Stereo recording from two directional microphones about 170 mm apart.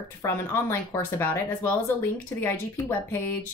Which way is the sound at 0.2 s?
15° left (ahead or behind).